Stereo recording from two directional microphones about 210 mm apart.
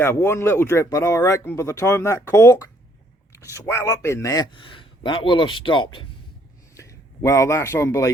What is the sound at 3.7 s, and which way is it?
A man's voice, 15° left (ahead or behind).